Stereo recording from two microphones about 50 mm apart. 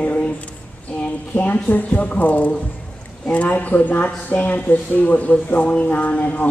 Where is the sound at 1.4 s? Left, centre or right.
Left.